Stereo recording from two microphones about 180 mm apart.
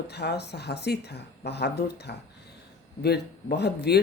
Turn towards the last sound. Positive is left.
turn(degrees=65)  # may be behind; listen again after turning